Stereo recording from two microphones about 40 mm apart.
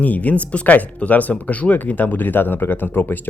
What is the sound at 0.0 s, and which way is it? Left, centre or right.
Speech, left.